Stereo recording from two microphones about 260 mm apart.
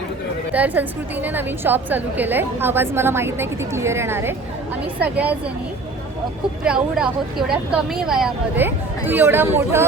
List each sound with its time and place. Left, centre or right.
0.5 s a woman's voice: centre
6.7 s speech: centre